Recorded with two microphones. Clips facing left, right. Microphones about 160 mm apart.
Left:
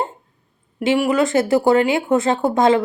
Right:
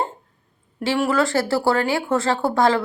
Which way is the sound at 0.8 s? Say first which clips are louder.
Left 3 dB; 15° left (ahead or behind).